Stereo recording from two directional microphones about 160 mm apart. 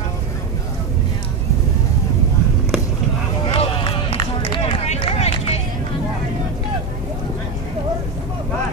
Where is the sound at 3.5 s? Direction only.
35° left (ahead or behind).